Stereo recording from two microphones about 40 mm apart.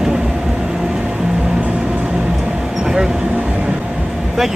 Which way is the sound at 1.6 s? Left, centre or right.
Right.